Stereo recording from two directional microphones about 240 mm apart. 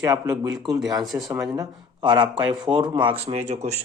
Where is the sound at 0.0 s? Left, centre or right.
Centre.